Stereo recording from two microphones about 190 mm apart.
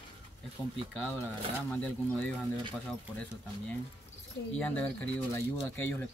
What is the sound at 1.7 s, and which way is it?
Speech, 5° left (ahead or behind).